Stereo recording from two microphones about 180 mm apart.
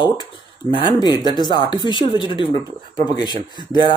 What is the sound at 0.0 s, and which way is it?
Speech, 25° left (ahead or behind).